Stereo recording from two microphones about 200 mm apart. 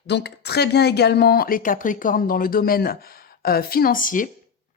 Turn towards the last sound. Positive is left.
turn(degrees=40)  # may be behind; listen again after turning